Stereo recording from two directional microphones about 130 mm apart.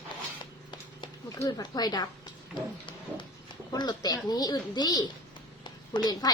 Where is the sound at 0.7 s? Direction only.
35° left (ahead or behind).